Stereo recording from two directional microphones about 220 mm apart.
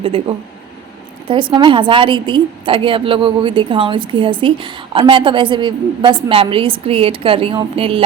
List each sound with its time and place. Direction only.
0.0 s a woman's voice: 25° right (ahead or behind)